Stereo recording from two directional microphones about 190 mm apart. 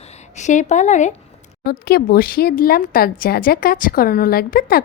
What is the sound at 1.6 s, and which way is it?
A woman's voice, 55° left (ahead or behind).